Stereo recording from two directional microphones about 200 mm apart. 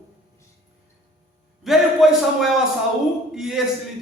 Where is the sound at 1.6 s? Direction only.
Centre (ahead or behind).